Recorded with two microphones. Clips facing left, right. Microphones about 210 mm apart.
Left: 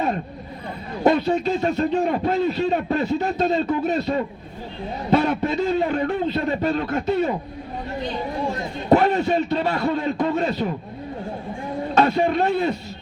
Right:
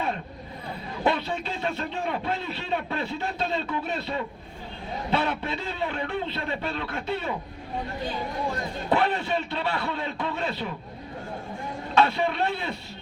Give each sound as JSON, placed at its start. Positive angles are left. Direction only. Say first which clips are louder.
{"t": 1.0, "sound": "a man's voice", "louder": "left 9 dB", "side_deg": 40}
{"t": 8.9, "sound": "a man's voice", "louder": "left 8 dB", "side_deg": 45}
{"t": 11.9, "sound": "a man's voice", "louder": "left 5 dB", "side_deg": 45}